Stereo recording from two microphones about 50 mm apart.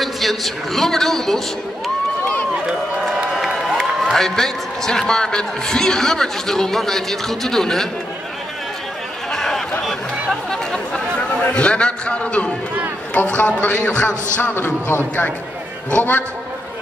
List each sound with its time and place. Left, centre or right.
0.0 s a man's voice: centre
3.3 s crowd: centre
4.1 s a man's voice: centre
9.3 s a sound: centre
10.5 s chatter: centre
11.5 s a man's voice: left
14.4 s a man's voice: left
15.9 s speech: left